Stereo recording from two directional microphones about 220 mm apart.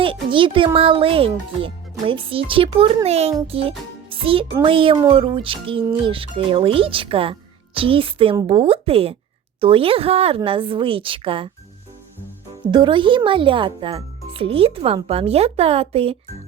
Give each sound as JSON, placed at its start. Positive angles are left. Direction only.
{"t": 0.0, "sound": "a child's voice", "side_deg": -25}
{"t": 12.7, "sound": "a child's voice", "side_deg": -20}